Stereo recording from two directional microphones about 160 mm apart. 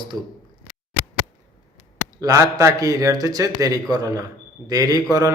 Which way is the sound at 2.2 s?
20° right (ahead or behind).